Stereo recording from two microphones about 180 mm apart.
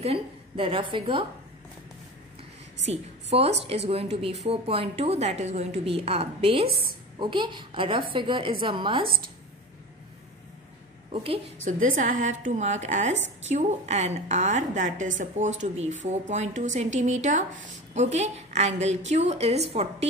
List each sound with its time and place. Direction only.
0.0 s a woman's voice: 30° right (ahead or behind)
2.9 s a woman's voice: 35° right (ahead or behind)
11.6 s a woman's voice: 45° right (ahead or behind)